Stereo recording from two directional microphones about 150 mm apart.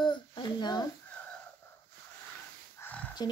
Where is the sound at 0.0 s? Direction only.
30° left (ahead or behind).